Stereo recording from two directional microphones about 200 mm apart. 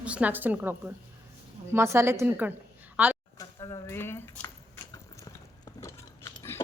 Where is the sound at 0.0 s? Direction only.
5° right (ahead or behind).